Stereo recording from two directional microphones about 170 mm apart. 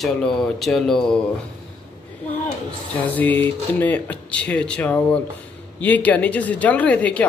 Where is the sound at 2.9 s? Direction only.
10° left (ahead or behind).